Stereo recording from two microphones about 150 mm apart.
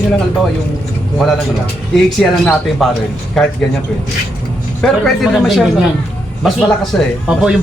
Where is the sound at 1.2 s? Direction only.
Centre (ahead or behind).